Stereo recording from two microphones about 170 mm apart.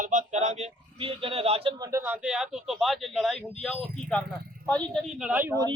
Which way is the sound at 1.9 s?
10° right (ahead or behind).